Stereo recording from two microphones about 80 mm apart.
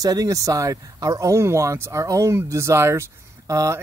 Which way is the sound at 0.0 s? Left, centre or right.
Right.